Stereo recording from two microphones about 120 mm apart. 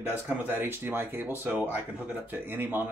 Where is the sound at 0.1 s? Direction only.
15° right (ahead or behind).